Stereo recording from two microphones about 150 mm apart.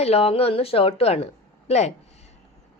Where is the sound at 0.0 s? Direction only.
40° left (ahead or behind).